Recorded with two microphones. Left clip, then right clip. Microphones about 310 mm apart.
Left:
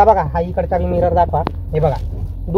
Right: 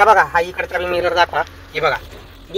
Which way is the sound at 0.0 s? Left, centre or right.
Right.